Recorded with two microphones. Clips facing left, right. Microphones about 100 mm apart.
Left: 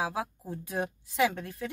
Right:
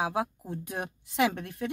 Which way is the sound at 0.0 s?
20° right (ahead or behind).